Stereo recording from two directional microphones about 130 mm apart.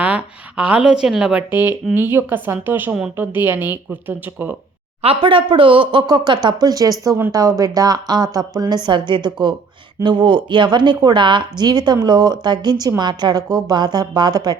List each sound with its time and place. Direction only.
0.0 s a woman's voice: 10° right (ahead or behind)
5.0 s a woman's voice: 40° right (ahead or behind)